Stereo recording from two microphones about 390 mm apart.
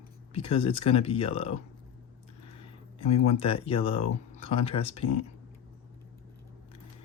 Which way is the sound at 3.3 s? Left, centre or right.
Centre.